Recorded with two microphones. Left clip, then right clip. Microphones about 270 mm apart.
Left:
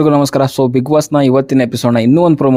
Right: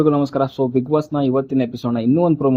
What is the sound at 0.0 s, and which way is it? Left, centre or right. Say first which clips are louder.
Speech: left 6 dB; left.